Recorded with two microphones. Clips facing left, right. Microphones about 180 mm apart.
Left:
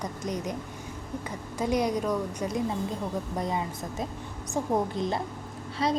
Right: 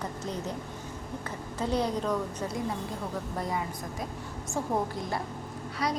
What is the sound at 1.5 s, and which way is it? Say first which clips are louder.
A woman's voice: left 3 dB; 15° left (ahead or behind).